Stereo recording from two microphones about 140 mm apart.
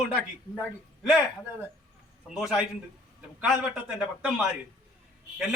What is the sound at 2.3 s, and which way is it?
A man's voice, 5° right (ahead or behind).